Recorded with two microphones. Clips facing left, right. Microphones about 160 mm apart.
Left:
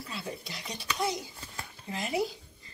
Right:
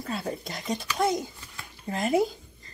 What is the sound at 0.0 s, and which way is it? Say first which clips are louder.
Speech: right 7 dB; 50° right (ahead or behind).